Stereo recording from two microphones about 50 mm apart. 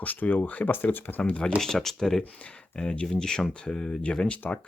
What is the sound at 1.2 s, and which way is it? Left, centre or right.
Speech, left.